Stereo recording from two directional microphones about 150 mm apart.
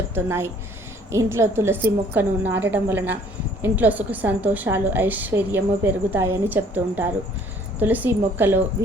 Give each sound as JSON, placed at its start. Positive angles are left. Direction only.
{"t": 0.1, "sound": "a woman's voice", "side_deg": -15}